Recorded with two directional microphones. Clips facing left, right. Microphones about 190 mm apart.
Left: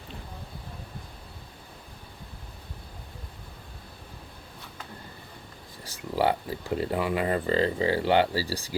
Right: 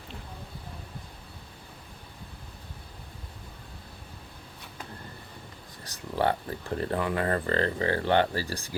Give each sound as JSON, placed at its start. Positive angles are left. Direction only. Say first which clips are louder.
{"t": 6.1, "sound": "speech", "louder": "left 2 dB", "side_deg": 10}
{"t": 8.4, "sound": "speech", "louder": "left 3 dB", "side_deg": -55}